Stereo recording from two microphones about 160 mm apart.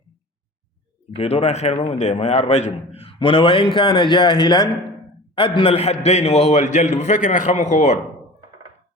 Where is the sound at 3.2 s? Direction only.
30° left (ahead or behind).